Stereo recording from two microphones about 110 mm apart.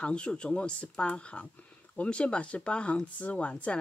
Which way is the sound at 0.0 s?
10° left (ahead or behind).